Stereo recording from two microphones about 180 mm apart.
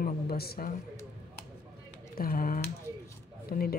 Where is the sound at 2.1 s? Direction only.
55° left (ahead or behind).